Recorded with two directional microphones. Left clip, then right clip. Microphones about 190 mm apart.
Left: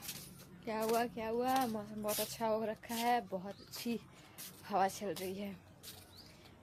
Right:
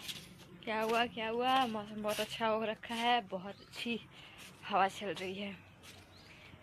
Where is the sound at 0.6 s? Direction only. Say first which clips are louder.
Right 2 dB; 10° left (ahead or behind).